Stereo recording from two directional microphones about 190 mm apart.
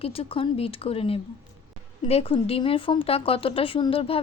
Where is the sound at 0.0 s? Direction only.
30° left (ahead or behind).